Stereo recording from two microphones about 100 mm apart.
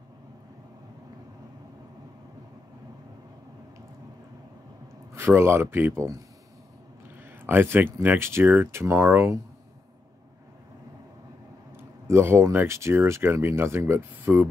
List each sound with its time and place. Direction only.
5.1 s speech: 25° right (ahead or behind)
7.3 s speech: 20° right (ahead or behind)
11.7 s speech: 25° right (ahead or behind)